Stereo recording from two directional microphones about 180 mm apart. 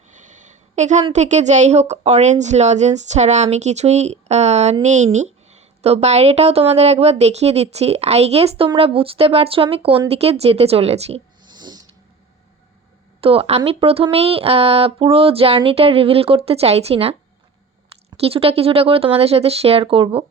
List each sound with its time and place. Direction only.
0.1 s a sound: 45° right (ahead or behind)
1.1 s a woman's voice: 40° right (ahead or behind)
11.5 s cat: 25° right (ahead or behind)
13.2 s a woman's voice: 30° right (ahead or behind)
18.2 s a woman's voice: 30° right (ahead or behind)